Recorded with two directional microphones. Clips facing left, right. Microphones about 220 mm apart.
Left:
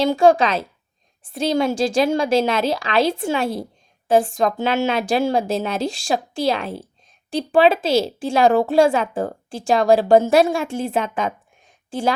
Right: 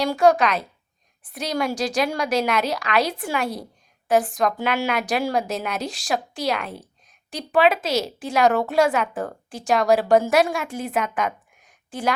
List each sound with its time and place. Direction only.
0.0 s a woman's voice: 25° left (ahead or behind)